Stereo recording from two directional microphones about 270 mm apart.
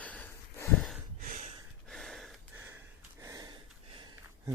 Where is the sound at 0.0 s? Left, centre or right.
Centre.